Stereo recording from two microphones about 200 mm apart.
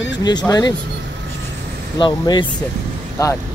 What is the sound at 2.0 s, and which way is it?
Speech, 25° left (ahead or behind).